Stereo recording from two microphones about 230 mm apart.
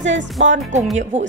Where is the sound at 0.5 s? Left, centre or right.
Right.